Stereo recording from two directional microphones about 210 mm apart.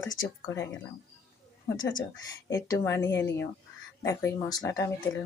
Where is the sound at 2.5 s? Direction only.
15° left (ahead or behind).